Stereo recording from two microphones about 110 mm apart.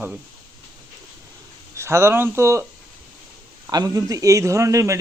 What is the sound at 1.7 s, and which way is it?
Speech, 25° right (ahead or behind).